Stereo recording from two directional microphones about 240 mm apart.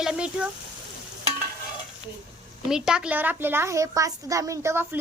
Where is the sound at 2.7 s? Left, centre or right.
Centre.